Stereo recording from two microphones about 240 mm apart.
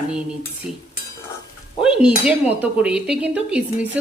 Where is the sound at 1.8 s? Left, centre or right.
Centre.